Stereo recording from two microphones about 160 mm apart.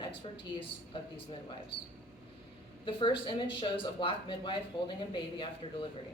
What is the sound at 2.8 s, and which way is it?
Speech, 30° left (ahead or behind).